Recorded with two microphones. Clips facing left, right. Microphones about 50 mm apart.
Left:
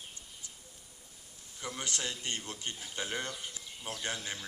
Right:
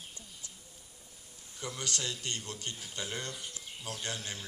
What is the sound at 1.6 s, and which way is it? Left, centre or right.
Speech, left.